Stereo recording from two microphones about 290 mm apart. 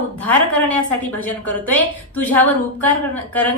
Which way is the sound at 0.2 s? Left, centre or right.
Centre.